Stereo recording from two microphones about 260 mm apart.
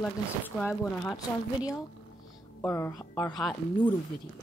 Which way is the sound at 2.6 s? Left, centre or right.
Centre.